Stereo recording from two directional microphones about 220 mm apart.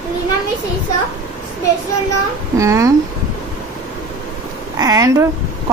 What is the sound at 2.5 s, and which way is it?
Speech, 15° right (ahead or behind).